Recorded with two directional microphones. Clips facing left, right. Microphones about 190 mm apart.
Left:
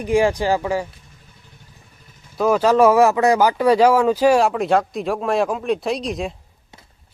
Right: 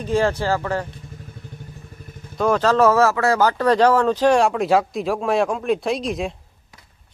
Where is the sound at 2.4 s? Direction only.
10° left (ahead or behind).